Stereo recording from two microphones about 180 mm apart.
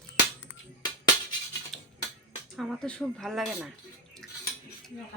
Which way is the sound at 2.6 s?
Centre (ahead or behind).